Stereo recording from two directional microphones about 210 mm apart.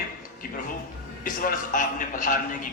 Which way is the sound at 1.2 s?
40° left (ahead or behind).